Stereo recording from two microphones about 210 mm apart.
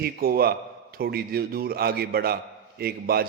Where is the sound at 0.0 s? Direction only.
45° right (ahead or behind).